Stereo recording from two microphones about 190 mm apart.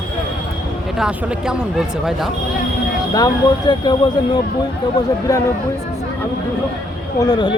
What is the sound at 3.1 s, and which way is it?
Speech, 20° left (ahead or behind).